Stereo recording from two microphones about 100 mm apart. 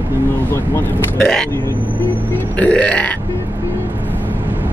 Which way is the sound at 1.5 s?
20° left (ahead or behind).